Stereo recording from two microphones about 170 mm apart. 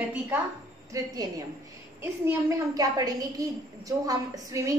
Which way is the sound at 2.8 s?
20° right (ahead or behind).